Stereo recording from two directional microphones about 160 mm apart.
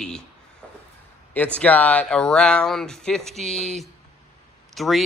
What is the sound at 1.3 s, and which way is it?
A man's voice, 10° left (ahead or behind).